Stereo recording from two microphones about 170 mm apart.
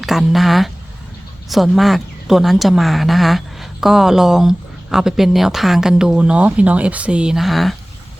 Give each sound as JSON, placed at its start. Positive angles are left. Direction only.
{"t": 0.0, "sound": "a woman's voice", "side_deg": 0}